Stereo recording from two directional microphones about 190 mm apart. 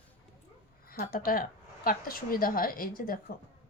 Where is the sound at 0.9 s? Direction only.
45° left (ahead or behind).